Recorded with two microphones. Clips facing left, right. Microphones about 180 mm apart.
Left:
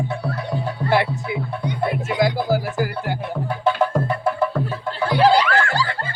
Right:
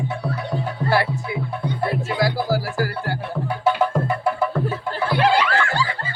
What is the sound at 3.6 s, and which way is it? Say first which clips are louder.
Music: even; 5° right (ahead or behind).